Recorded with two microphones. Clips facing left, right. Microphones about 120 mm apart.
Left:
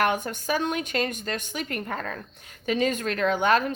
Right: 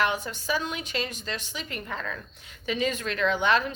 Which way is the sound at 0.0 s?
50° left (ahead or behind).